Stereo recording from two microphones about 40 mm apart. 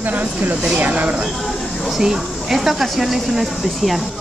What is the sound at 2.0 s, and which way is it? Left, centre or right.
Speech, centre.